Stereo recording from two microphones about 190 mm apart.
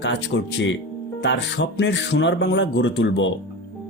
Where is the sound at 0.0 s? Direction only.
70° left (ahead or behind).